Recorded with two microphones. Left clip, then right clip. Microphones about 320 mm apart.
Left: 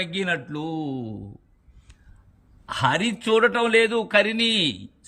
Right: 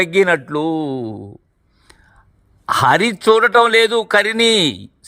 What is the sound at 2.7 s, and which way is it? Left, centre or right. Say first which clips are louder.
Speech: right 9 dB; centre.